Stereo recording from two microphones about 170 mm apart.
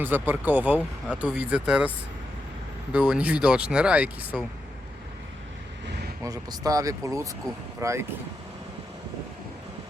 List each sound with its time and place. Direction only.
0.0 s speech: 10° right (ahead or behind)
2.9 s speech: 10° right (ahead or behind)
6.2 s speech: 20° right (ahead or behind)